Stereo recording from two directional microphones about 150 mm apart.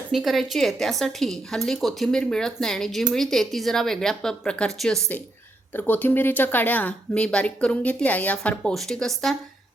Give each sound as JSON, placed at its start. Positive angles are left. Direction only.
{"t": 0.1, "sound": "a woman's voice", "side_deg": 0}